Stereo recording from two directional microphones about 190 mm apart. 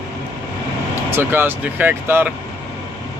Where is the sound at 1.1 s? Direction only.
10° right (ahead or behind).